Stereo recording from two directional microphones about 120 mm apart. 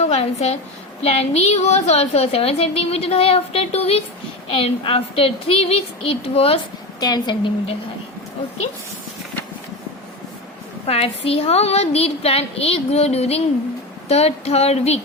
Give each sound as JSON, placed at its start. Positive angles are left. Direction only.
{"t": 0.0, "sound": "a woman's voice", "side_deg": 60}
{"t": 4.5, "sound": "speech", "side_deg": 45}
{"t": 7.0, "sound": "a woman's voice", "side_deg": 35}
{"t": 10.8, "sound": "a woman's voice", "side_deg": 55}